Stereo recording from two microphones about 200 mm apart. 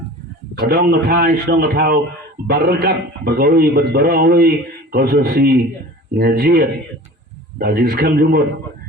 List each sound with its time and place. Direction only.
0.7 s a man's voice: 50° right (ahead or behind)